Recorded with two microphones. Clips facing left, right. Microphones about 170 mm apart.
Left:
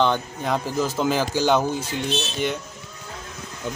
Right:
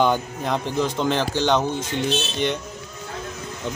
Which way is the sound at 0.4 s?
5° left (ahead or behind).